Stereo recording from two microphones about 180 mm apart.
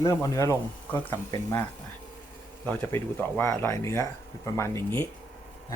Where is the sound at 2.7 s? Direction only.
10° left (ahead or behind).